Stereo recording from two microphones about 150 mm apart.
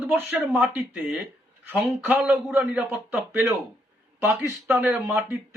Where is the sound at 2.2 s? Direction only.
Centre (ahead or behind).